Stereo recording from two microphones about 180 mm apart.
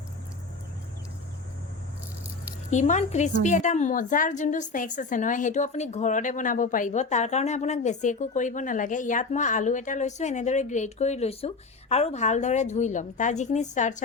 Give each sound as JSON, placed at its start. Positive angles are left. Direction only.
{"t": 2.6, "sound": "a woman's voice", "side_deg": 40}